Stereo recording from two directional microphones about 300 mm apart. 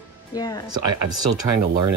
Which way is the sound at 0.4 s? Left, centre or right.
Centre.